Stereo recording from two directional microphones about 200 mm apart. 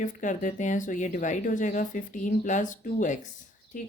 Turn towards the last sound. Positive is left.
turn(degrees=40)  # may be behind; listen again after turning